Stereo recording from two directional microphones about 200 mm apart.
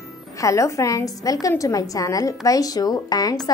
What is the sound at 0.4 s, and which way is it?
Speech, 15° left (ahead or behind).